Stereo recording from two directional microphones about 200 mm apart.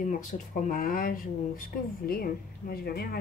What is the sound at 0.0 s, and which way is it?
Speech, 40° left (ahead or behind).